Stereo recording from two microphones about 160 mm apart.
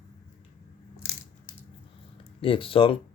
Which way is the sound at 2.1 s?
35° left (ahead or behind).